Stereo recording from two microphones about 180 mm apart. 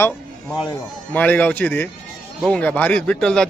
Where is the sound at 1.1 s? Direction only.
10° left (ahead or behind).